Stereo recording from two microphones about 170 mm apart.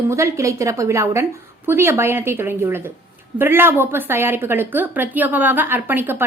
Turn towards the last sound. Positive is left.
turn(degrees=-10)  # may be behind; listen again after turning